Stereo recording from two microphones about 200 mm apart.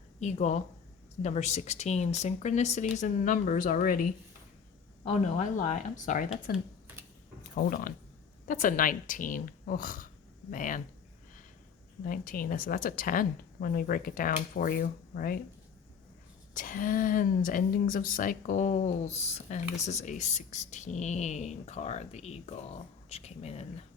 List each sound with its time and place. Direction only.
0.2 s a woman's voice: 35° left (ahead or behind)
5.4 s a woman's voice: 40° left (ahead or behind)
12.0 s a woman's voice: 45° left (ahead or behind)
16.6 s a woman's voice: 40° left (ahead or behind)